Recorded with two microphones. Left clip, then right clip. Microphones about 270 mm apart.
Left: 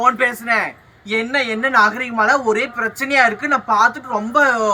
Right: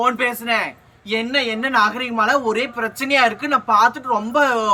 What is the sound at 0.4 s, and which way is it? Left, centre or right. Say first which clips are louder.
Speech: left 2 dB; centre.